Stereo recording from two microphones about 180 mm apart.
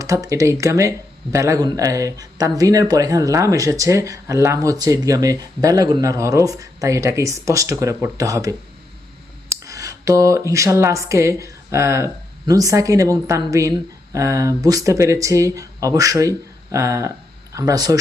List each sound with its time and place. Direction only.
0.0 s speech: 20° right (ahead or behind)
9.5 s a sound: 20° right (ahead or behind)
10.5 s speech: 15° right (ahead or behind)